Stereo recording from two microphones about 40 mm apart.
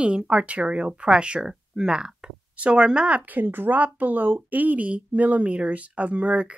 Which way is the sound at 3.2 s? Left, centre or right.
Right.